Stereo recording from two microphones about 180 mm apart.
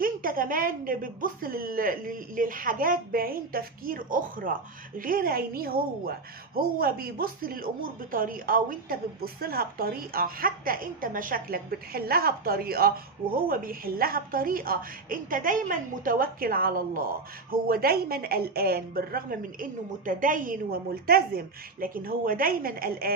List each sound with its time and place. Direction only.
0.0 s a woman's voice: 50° right (ahead or behind)